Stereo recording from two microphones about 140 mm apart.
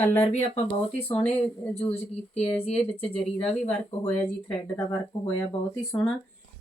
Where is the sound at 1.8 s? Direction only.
45° left (ahead or behind).